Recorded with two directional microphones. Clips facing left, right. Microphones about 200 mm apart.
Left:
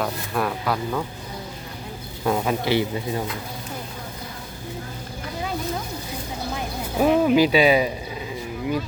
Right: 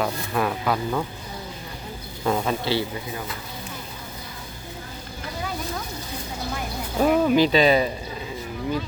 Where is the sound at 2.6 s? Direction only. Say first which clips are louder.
Left 3 dB; 20° left (ahead or behind).